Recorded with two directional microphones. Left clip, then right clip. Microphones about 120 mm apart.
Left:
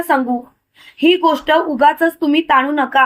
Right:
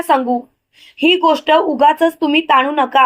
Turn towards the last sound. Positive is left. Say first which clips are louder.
# right 1 dB
turn(degrees=-40)  # may be behind; listen again after turning